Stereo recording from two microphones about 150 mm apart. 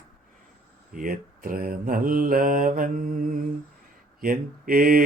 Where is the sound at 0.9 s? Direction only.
70° right (ahead or behind).